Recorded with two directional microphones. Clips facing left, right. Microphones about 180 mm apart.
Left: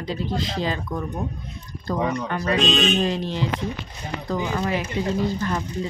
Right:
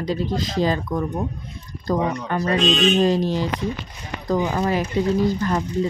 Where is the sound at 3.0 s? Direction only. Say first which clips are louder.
Right 5 dB; 40° right (ahead or behind).